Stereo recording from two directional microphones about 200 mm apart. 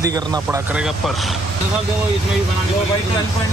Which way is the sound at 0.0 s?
20° right (ahead or behind).